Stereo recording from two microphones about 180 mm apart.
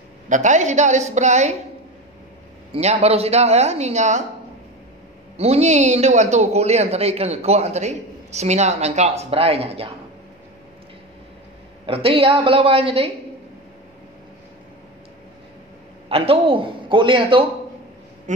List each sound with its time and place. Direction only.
0.3 s speech: 40° right (ahead or behind)
2.7 s speech: 35° right (ahead or behind)
5.4 s speech: 35° right (ahead or behind)
11.8 s speech: 30° right (ahead or behind)
16.1 s a man's voice: 35° right (ahead or behind)